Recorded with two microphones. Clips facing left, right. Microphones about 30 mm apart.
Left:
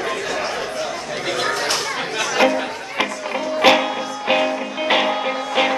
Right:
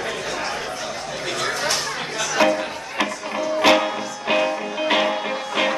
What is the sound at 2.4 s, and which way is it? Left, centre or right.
Music, centre.